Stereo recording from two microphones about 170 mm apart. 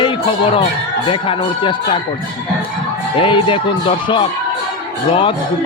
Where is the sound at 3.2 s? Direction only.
30° left (ahead or behind).